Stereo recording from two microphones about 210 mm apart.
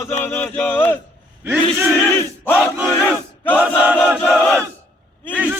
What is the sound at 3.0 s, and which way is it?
Battle cry, 10° left (ahead or behind).